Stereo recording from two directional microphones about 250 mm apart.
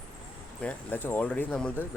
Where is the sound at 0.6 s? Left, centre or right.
Centre.